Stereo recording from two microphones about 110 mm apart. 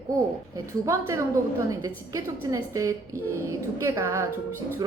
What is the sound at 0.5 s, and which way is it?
A woman's voice, 25° right (ahead or behind).